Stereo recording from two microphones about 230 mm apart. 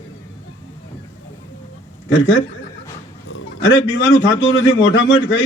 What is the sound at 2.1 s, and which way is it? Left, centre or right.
A man's voice, left.